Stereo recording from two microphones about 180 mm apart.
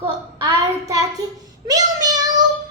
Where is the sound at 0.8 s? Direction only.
20° right (ahead or behind).